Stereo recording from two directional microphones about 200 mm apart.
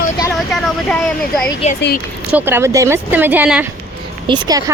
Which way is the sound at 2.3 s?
10° right (ahead or behind).